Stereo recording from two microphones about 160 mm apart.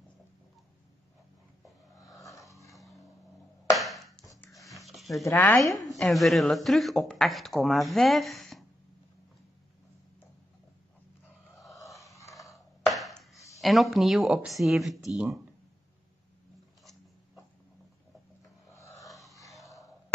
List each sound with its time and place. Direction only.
2.2 s dog: 20° left (ahead or behind)
3.7 s a sound: centre (ahead or behind)
5.2 s speech: 15° left (ahead or behind)
5.8 s speech: centre (ahead or behind)
11.7 s a sound: 20° left (ahead or behind)
12.5 s chopping: centre (ahead or behind)
13.6 s speech: centre (ahead or behind)
18.4 s filing: 20° left (ahead or behind)
19.5 s a sound: centre (ahead or behind)